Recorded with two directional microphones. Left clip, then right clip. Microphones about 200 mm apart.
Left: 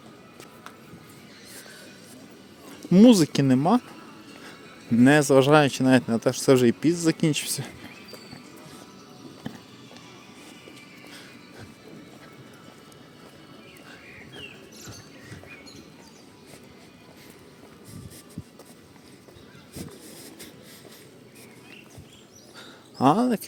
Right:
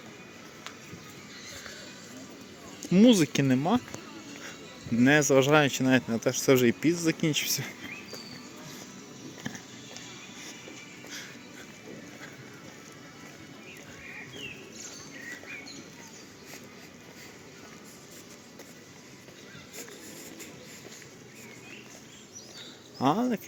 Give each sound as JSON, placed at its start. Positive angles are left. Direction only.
{"t": 2.9, "sound": "speech", "side_deg": 30}
{"t": 4.9, "sound": "speech", "side_deg": 25}
{"t": 9.5, "sound": "music", "side_deg": 15}
{"t": 23.0, "sound": "a sound", "side_deg": 25}